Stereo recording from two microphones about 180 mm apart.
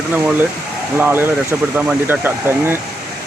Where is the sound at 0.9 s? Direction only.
10° right (ahead or behind).